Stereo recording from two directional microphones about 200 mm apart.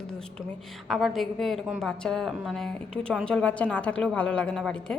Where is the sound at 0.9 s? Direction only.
Centre (ahead or behind).